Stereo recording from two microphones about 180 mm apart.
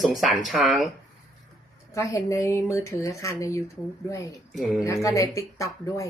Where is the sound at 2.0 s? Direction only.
15° left (ahead or behind).